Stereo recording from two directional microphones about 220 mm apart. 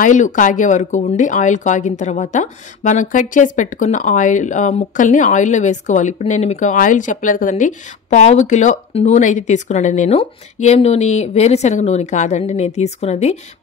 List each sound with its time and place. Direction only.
0.0 s speech: 35° left (ahead or behind)